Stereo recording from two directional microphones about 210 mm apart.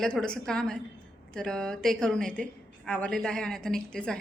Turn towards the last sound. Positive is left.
turn(degrees=5)  # may be behind; listen again after turning